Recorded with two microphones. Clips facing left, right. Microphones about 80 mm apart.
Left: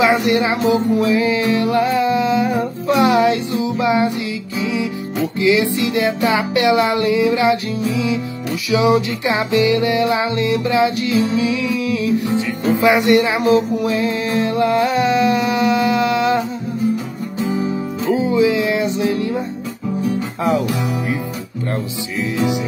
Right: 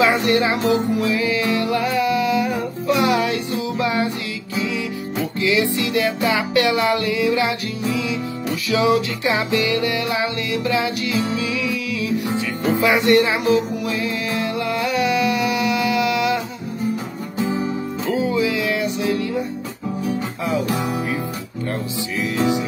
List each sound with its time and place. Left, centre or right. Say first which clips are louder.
0.0 s music: left 2 dB; centre
8.6 s music: left 3 dB; centre
18.0 s music: left 5 dB; left